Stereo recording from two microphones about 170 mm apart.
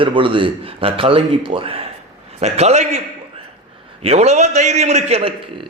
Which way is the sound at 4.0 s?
40° right (ahead or behind).